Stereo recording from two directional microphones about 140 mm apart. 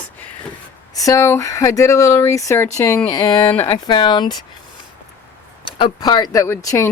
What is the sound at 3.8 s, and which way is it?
Speech, 35° left (ahead or behind).